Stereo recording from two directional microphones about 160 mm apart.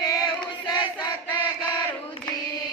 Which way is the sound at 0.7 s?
25° left (ahead or behind).